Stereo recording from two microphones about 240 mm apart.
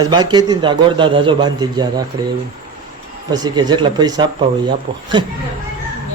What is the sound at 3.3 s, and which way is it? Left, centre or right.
A man's voice, centre.